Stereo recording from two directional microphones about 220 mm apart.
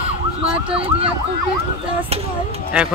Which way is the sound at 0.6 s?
25° right (ahead or behind).